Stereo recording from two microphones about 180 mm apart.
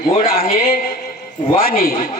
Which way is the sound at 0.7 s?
55° left (ahead or behind).